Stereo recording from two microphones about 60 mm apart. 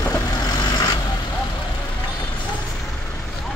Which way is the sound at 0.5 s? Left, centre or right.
Left.